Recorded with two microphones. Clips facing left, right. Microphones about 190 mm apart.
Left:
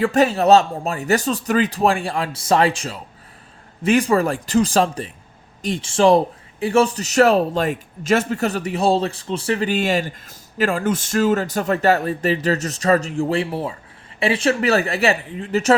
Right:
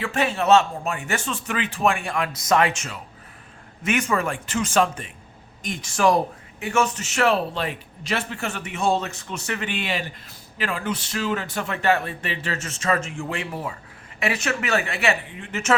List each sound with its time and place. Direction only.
0.0 s a man's voice: 40° left (ahead or behind)